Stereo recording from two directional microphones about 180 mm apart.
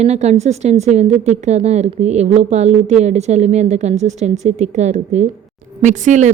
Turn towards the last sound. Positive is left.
turn(degrees=-40)  # may be behind; listen again after turning